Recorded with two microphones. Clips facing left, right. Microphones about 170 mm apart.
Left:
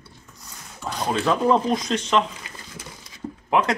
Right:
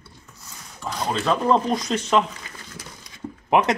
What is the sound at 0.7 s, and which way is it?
Speech, centre (ahead or behind).